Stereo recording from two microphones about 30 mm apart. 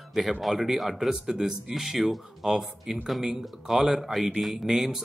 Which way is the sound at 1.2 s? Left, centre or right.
Centre.